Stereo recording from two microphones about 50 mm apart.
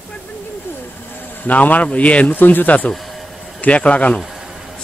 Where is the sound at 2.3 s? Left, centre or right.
Left.